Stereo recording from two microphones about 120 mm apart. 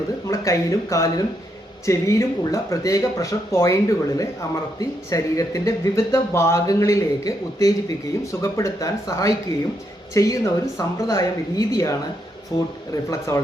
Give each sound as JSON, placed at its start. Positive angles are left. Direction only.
{"t": 0.3, "sound": "speech", "side_deg": 25}
{"t": 12.5, "sound": "speech", "side_deg": 40}
{"t": 12.9, "sound": "speech", "side_deg": 25}